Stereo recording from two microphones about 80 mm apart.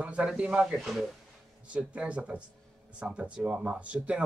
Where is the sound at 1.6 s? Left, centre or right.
Centre.